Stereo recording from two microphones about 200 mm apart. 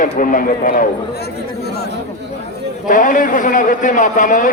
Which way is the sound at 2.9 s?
40° left (ahead or behind).